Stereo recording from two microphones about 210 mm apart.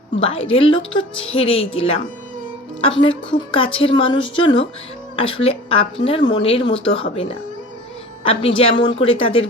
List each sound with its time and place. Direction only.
0.2 s a woman's voice: 25° left (ahead or behind)
3.3 s a woman's voice: 25° left (ahead or behind)